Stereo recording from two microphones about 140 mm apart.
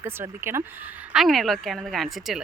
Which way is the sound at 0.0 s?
15° right (ahead or behind).